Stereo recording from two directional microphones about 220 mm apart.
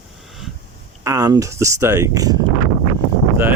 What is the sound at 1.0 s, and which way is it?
Speech, 15° right (ahead or behind).